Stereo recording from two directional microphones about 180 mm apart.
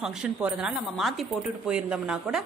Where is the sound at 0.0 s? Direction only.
5° right (ahead or behind).